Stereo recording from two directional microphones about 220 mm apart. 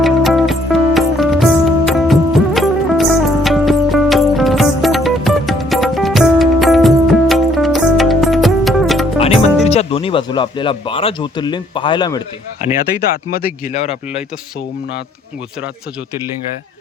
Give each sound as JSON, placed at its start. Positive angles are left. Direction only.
{"t": 0.0, "sound": "music", "side_deg": 0}
{"t": 9.1, "sound": "music", "side_deg": 25}
{"t": 9.6, "sound": "speech", "side_deg": 25}
{"t": 13.0, "sound": "speech", "side_deg": 45}